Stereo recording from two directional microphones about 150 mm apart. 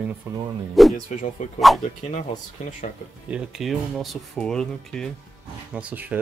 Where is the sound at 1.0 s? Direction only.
55° left (ahead or behind).